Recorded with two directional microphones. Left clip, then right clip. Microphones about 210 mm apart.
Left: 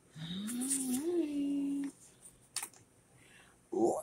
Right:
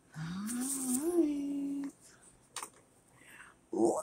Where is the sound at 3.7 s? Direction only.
5° right (ahead or behind).